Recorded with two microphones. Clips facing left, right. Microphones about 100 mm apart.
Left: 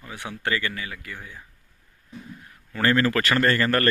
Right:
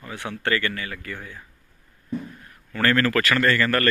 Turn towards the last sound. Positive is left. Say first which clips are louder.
# even
turn(degrees=30)  # may be behind; listen again after turning